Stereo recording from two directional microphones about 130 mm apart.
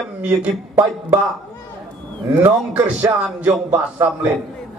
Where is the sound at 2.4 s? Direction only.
15° right (ahead or behind).